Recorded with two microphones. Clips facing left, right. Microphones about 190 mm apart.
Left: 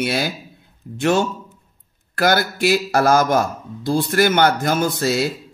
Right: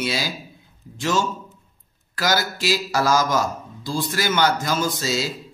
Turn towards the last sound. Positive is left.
turn(degrees=60)  # may be behind; listen again after turning